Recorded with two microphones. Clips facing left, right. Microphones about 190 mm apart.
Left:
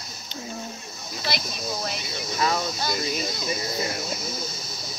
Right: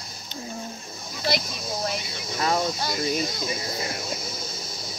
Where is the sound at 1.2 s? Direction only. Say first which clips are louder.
Right 3 dB; 45° right (ahead or behind).